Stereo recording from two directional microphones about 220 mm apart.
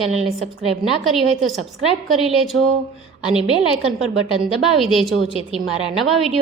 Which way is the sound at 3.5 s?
20° left (ahead or behind).